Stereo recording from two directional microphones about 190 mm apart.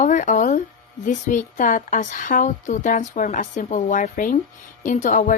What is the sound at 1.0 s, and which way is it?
A woman's voice, 40° left (ahead or behind).